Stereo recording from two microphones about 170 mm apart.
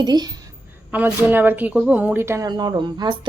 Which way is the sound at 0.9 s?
10° right (ahead or behind).